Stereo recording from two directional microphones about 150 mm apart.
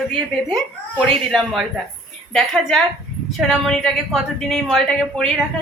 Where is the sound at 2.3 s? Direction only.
Centre (ahead or behind).